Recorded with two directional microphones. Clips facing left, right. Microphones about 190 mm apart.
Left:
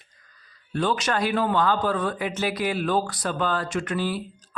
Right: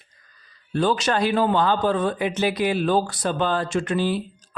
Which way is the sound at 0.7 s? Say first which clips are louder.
Right 3 dB; 35° right (ahead or behind).